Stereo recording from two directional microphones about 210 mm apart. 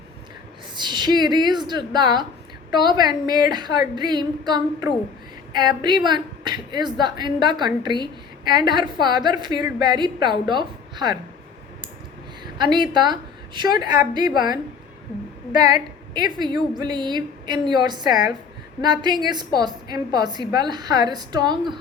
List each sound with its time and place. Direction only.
0.8 s a woman's voice: 20° right (ahead or behind)
12.5 s a woman's voice: 20° right (ahead or behind)
16.1 s a woman's voice: 20° right (ahead or behind)